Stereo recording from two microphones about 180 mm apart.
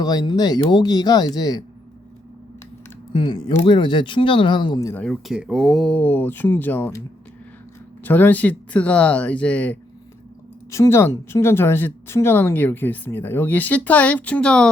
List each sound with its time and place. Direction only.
0.0 s speech: 20° left (ahead or behind)
3.1 s speech: 25° left (ahead or behind)
5.0 s speech: centre (ahead or behind)
8.0 s speech: 10° left (ahead or behind)